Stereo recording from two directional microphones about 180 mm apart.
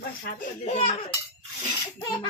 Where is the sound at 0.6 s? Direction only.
40° left (ahead or behind).